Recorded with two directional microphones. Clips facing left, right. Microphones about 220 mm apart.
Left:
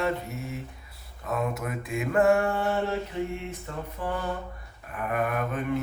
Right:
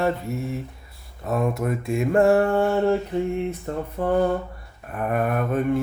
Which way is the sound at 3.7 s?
45° right (ahead or behind).